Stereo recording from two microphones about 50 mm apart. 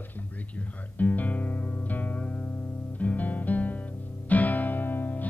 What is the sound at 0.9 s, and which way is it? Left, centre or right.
Music, left.